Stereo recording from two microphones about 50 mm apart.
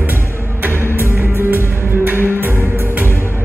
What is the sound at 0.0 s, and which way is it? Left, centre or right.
Music, right.